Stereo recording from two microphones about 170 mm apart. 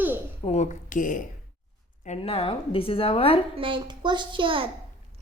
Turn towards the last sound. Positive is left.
turn(degrees=-30)  # may be behind; listen again after turning